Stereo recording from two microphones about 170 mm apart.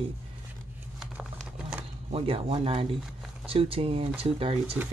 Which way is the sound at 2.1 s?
35° right (ahead or behind).